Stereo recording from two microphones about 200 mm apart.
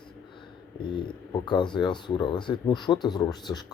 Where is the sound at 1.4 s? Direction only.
20° left (ahead or behind).